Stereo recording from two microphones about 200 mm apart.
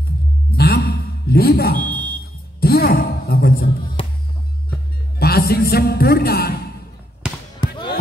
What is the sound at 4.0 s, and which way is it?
Music, 25° left (ahead or behind).